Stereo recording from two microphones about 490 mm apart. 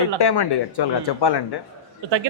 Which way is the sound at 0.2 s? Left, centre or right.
Left.